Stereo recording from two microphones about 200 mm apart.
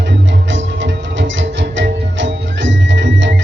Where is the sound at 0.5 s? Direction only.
65° right (ahead or behind).